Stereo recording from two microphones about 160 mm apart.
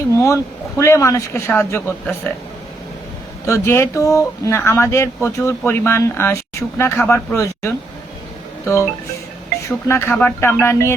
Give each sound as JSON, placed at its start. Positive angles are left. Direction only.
{"t": 0.1, "sound": "speech", "side_deg": 20}
{"t": 3.4, "sound": "speech", "side_deg": 15}